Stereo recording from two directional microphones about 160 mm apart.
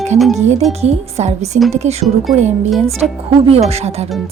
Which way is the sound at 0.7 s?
40° right (ahead or behind).